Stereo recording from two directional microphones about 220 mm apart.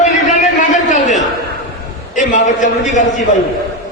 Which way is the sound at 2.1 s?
35° left (ahead or behind).